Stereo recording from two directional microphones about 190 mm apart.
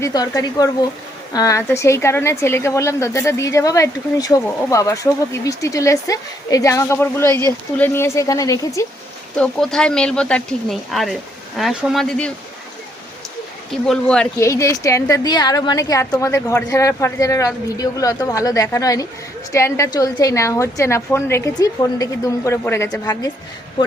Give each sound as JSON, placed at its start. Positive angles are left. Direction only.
{"t": 0.0, "sound": "speech", "side_deg": 20}
{"t": 9.4, "sound": "speech", "side_deg": 5}
{"t": 13.7, "sound": "speech", "side_deg": 5}
{"t": 14.3, "sound": "speech", "side_deg": 15}